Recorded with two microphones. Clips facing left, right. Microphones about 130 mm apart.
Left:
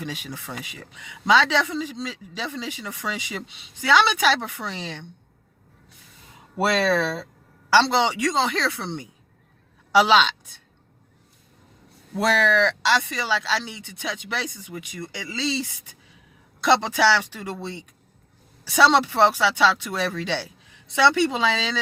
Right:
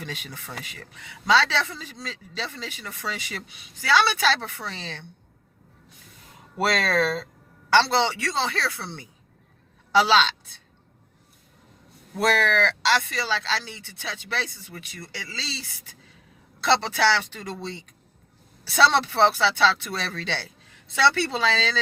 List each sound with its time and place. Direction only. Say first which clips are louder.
0.0 s a man's voice: left 4 dB; 15° left (ahead or behind)
6.6 s a man's voice: left 2 dB; 25° left (ahead or behind)
12.1 s a man's voice: left 2 dB; 15° left (ahead or behind)